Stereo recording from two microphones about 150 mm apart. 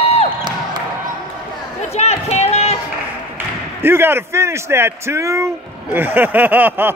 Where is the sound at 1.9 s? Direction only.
45° left (ahead or behind).